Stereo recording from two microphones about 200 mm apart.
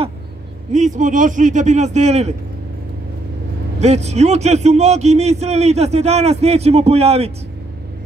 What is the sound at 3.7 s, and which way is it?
A man's voice, 35° right (ahead or behind).